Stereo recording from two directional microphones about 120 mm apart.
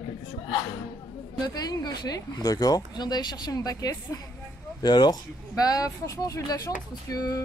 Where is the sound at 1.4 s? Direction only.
35° left (ahead or behind).